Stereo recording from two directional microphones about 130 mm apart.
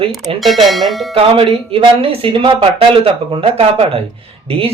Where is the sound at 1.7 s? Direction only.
45° right (ahead or behind).